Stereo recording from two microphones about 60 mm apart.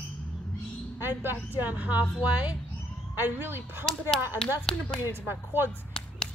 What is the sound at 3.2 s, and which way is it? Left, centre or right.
Speech, right.